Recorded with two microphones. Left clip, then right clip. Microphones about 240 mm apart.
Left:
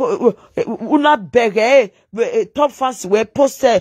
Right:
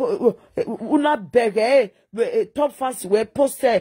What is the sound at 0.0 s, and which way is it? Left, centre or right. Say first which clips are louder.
Speech: left 4 dB; centre.